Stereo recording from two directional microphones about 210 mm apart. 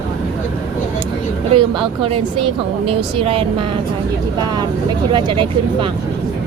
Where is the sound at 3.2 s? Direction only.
25° right (ahead or behind).